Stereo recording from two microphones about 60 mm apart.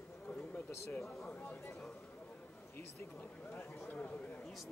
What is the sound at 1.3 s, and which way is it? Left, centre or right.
Speech, left.